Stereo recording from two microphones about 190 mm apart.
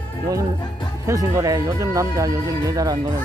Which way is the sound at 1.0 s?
15° right (ahead or behind).